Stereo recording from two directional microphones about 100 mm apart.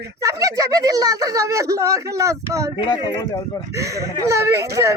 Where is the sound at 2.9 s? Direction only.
45° left (ahead or behind).